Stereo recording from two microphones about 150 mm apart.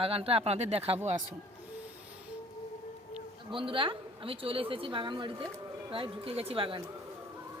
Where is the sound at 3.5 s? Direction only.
35° right (ahead or behind).